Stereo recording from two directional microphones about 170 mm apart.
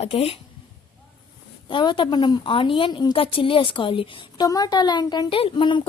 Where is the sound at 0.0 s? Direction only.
35° left (ahead or behind).